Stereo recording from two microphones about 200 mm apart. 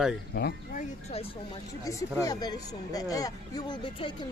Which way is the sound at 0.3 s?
55° left (ahead or behind).